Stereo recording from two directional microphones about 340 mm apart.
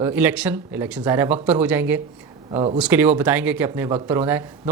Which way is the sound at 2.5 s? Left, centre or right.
Centre.